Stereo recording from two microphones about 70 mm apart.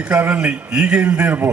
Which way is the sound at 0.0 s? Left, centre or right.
Centre.